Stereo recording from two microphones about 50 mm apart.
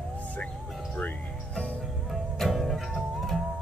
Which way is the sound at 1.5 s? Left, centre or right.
Left.